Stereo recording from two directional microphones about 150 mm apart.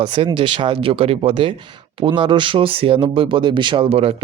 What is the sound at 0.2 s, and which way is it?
Speech, 35° right (ahead or behind).